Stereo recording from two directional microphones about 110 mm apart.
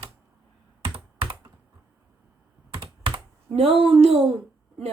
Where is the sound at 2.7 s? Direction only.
50° right (ahead or behind).